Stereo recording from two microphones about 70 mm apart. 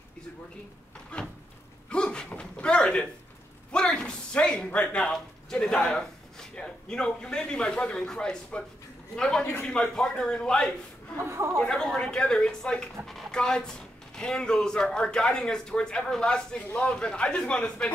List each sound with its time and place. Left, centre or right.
1.1 s speech: centre
1.9 s a sound: centre
4.8 s speech: centre
11.2 s speech: right
11.6 s speech: centre